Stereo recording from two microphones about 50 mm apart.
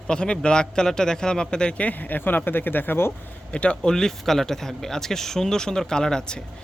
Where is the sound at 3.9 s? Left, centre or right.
Centre.